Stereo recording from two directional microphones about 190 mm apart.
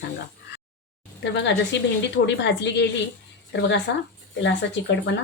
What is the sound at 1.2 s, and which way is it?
Speech, 70° left (ahead or behind).